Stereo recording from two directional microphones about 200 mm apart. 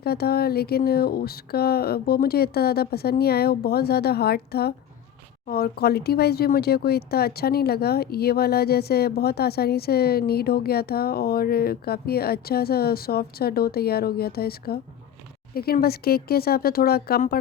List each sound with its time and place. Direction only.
0.0 s speech: 50° left (ahead or behind)